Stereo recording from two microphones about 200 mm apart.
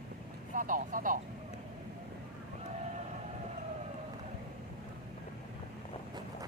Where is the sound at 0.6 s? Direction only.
40° right (ahead or behind).